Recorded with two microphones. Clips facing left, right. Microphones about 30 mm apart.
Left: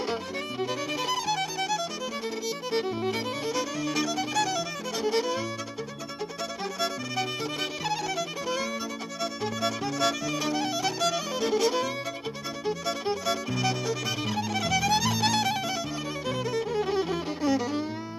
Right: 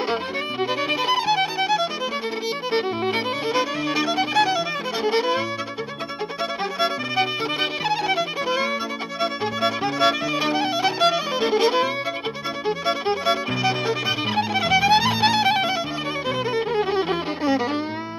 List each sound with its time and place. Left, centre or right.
0.1 s music: right
7.8 s violin: right
9.2 s music: right